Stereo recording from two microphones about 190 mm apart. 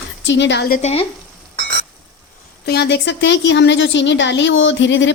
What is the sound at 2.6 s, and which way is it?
Speech, 60° left (ahead or behind).